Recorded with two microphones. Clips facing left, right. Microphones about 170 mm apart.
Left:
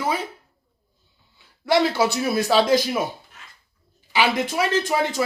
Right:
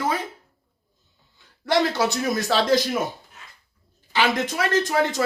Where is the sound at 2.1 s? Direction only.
10° left (ahead or behind).